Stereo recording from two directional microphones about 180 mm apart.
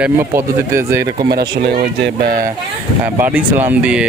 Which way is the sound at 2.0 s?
55° right (ahead or behind).